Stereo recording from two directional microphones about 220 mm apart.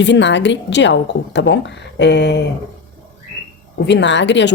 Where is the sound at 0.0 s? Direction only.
55° left (ahead or behind).